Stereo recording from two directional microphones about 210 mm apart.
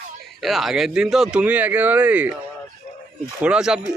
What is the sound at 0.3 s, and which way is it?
Speech, centre (ahead or behind).